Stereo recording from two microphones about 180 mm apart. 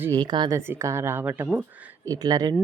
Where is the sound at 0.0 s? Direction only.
20° right (ahead or behind).